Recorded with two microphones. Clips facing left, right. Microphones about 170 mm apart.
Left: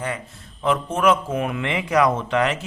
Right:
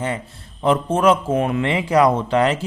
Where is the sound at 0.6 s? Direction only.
30° right (ahead or behind).